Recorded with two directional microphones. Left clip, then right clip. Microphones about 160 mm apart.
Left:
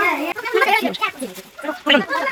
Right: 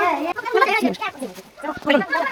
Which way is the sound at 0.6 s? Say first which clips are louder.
Left 2 dB; 50° right (ahead or behind).